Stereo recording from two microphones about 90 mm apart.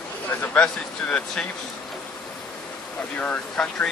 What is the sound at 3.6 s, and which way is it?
Speech, 5° left (ahead or behind).